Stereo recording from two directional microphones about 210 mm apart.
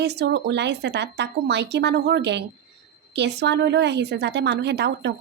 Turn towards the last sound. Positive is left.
turn(degrees=-55)  # may be behind; listen again after turning